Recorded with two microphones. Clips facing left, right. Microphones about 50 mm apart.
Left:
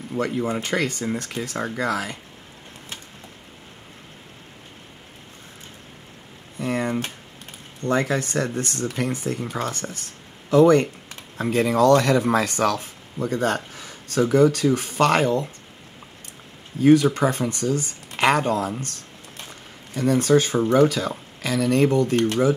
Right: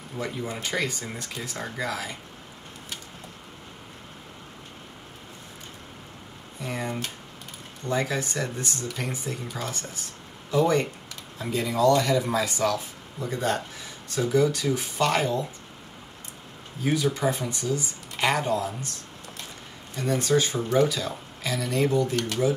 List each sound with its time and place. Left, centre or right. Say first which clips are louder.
0.4 s speech: left 3 dB; left
6.6 s a sound: left 7 dB; left
7.9 s speech: left 5 dB; left
16.8 s speech: left 9 dB; left
20.0 s speech: left 5 dB; left